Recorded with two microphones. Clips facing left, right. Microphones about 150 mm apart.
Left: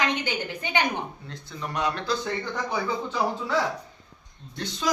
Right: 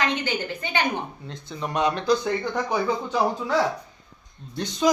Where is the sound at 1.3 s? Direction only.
20° right (ahead or behind).